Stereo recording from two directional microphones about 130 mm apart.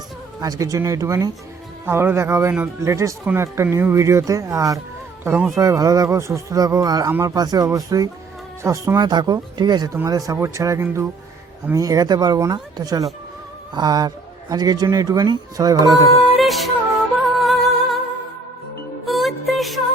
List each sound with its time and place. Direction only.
0.4 s speech: 25° right (ahead or behind)
7.3 s speech: 30° right (ahead or behind)
16.4 s music: centre (ahead or behind)
19.0 s music: centre (ahead or behind)